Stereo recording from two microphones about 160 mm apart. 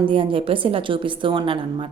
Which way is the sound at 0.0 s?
35° right (ahead or behind).